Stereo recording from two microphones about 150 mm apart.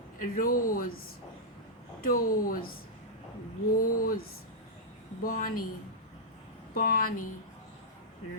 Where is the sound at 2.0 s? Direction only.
70° left (ahead or behind).